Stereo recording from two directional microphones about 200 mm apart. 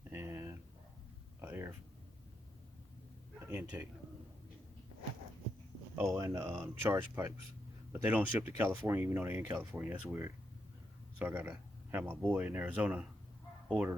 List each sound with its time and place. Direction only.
0.1 s a sound: 10° right (ahead or behind)
3.4 s a man's voice: 10° right (ahead or behind)
6.1 s speech: 15° right (ahead or behind)